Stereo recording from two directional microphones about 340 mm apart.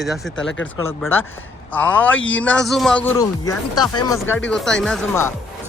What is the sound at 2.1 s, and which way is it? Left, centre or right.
Speech, left.